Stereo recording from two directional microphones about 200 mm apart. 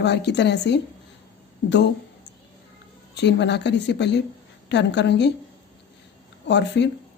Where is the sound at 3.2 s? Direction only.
60° left (ahead or behind).